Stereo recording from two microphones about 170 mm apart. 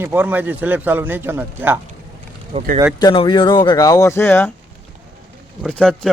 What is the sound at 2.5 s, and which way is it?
Speech, 35° right (ahead or behind).